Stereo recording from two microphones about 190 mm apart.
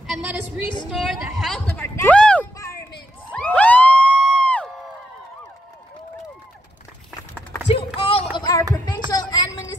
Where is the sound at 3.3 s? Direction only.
5° left (ahead or behind).